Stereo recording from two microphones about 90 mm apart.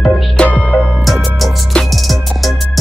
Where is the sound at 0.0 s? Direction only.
Centre (ahead or behind).